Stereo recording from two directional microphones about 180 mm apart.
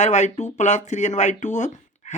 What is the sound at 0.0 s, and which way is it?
Speech, 40° left (ahead or behind).